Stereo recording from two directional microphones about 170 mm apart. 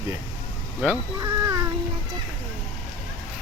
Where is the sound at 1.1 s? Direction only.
20° right (ahead or behind).